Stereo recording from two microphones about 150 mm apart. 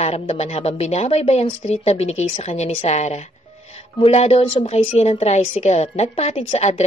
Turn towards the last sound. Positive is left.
turn(degrees=45)  # may be behind; listen again after turning